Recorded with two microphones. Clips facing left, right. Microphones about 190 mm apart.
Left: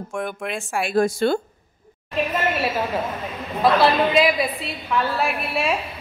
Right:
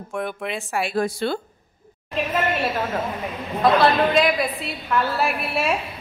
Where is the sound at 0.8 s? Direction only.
45° left (ahead or behind).